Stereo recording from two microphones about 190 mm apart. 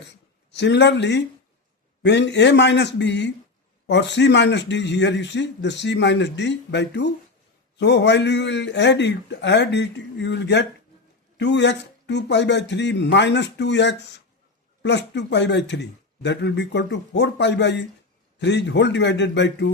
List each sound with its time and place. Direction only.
0.5 s a man's voice: 65° left (ahead or behind)